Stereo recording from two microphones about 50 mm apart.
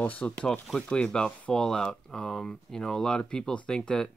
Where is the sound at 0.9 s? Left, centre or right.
Centre.